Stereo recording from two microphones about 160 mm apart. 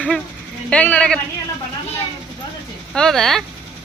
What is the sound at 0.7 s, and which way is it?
Speech, 10° left (ahead or behind).